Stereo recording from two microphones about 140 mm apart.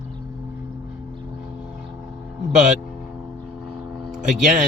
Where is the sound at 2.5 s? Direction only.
55° right (ahead or behind).